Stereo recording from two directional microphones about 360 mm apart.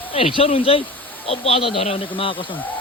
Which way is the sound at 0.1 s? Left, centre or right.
Centre.